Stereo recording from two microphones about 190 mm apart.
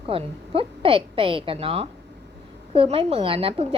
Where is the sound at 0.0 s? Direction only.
30° right (ahead or behind).